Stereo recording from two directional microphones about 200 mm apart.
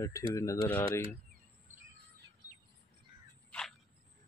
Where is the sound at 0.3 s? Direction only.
15° left (ahead or behind).